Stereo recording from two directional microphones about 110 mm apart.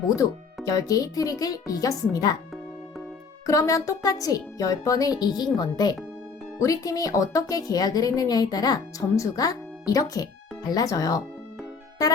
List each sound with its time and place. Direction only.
0.2 s a woman's voice: 30° left (ahead or behind)
3.4 s a woman's voice: 30° left (ahead or behind)